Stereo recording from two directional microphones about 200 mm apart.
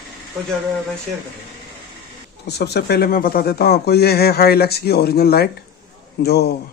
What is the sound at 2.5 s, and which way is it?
A man's voice, 55° left (ahead or behind).